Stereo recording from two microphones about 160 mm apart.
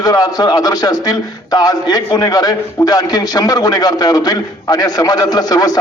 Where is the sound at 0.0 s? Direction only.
25° left (ahead or behind).